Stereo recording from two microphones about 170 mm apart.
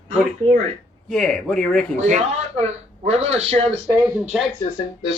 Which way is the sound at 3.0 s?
35° right (ahead or behind).